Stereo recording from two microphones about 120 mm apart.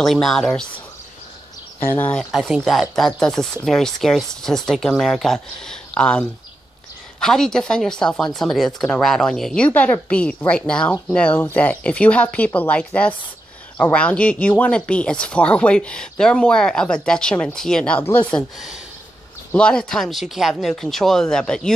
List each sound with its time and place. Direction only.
0.0 s speech: centre (ahead or behind)
1.9 s speech: 15° left (ahead or behind)
2.1 s speech: centre (ahead or behind); by 18.3 s 15° left (ahead or behind)
19.5 s speech: 10° left (ahead or behind)